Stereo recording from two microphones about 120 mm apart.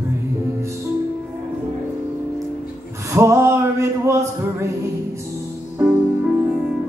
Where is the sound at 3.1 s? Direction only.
20° right (ahead or behind).